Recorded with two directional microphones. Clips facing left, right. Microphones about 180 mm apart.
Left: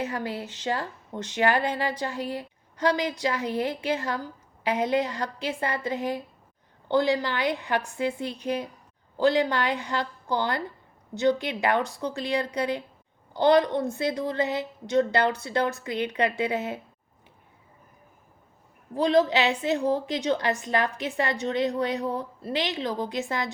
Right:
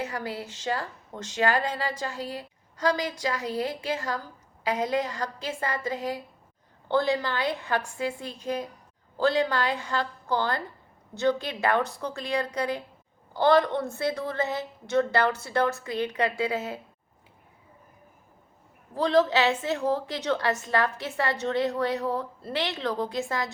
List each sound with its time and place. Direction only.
0.0 s a woman's voice: 20° left (ahead or behind)
18.9 s a woman's voice: 15° left (ahead or behind)